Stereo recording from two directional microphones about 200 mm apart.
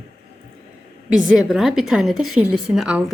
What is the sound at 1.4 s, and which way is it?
Speech, centre (ahead or behind).